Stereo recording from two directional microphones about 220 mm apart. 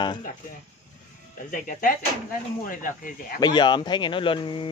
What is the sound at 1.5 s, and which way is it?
Speech, 35° left (ahead or behind).